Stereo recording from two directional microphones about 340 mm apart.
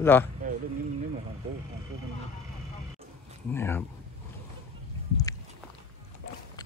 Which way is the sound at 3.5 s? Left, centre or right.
Centre.